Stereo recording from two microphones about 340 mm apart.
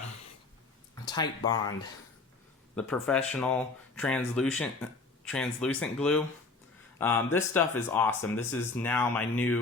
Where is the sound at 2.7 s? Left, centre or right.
Centre.